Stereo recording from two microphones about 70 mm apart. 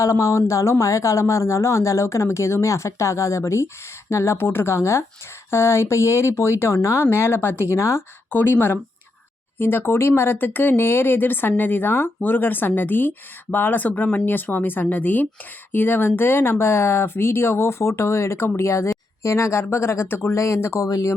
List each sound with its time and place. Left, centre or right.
0.0 s speech: left
8.3 s speech: left
20.3 s speech: left